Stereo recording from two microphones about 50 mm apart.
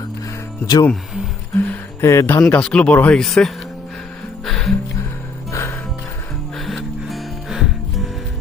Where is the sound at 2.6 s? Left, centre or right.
Centre.